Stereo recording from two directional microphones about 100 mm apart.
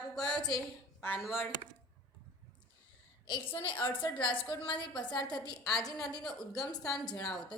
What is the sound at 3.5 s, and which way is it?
Speech, 65° left (ahead or behind).